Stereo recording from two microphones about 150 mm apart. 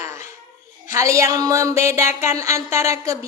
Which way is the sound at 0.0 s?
20° right (ahead or behind).